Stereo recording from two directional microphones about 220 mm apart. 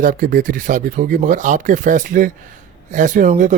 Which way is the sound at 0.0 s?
40° right (ahead or behind).